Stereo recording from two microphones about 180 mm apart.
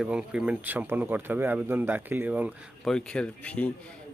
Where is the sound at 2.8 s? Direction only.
5° left (ahead or behind).